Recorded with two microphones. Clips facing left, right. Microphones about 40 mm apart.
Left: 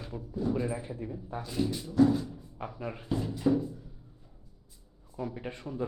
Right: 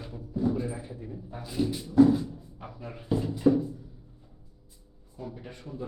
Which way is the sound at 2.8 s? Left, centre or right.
Centre.